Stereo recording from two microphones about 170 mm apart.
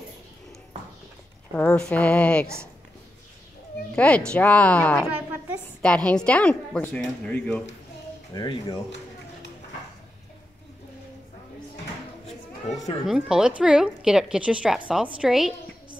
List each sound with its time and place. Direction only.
1.5 s a woman's voice: 5° left (ahead or behind)
3.9 s a woman's voice: 5° left (ahead or behind)
8.3 s speech: 25° left (ahead or behind)
13.0 s a woman's voice: 5° right (ahead or behind)